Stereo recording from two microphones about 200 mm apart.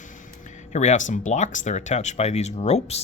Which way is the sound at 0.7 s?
35° left (ahead or behind).